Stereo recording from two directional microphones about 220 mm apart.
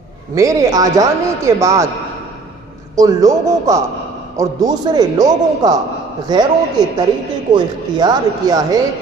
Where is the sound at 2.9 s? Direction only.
15° right (ahead or behind).